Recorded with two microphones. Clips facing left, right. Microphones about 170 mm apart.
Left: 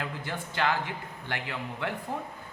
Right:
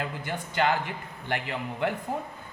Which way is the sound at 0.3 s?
15° right (ahead or behind).